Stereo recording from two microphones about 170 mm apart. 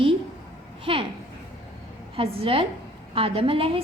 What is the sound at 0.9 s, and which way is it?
Speech, 30° right (ahead or behind).